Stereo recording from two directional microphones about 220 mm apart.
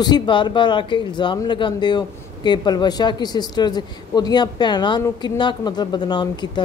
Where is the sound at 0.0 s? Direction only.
20° left (ahead or behind).